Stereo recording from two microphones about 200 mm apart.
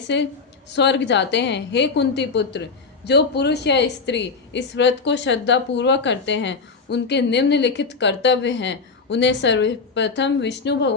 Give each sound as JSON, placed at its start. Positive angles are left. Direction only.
{"t": 0.1, "sound": "a woman's voice", "side_deg": 60}